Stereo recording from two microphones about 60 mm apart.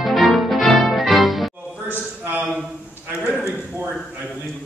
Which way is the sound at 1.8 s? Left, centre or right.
Right.